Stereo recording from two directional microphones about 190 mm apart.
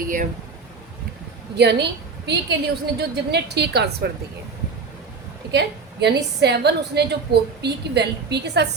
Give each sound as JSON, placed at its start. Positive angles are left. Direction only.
{"t": 0.0, "sound": "speech", "side_deg": -45}
{"t": 1.5, "sound": "a woman's voice", "side_deg": -60}
{"t": 5.5, "sound": "a woman's voice", "side_deg": -65}